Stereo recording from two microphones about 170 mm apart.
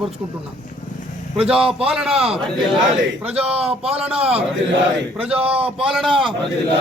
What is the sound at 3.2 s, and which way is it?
A man's voice, 35° right (ahead or behind).